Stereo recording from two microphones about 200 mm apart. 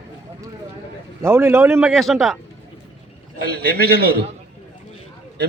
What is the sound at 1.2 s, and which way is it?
Speech, 10° right (ahead or behind).